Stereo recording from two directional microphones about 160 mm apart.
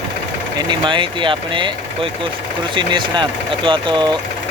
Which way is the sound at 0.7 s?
30° right (ahead or behind).